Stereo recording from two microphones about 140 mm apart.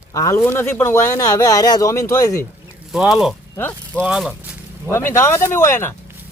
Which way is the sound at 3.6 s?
15° left (ahead or behind).